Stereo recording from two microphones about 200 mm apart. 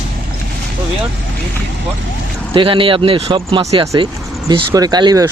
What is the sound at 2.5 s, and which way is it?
Speech, 25° right (ahead or behind).